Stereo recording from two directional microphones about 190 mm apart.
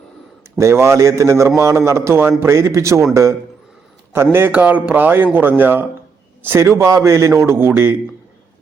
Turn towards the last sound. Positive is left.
turn(degrees=-15)  # may be behind; listen again after turning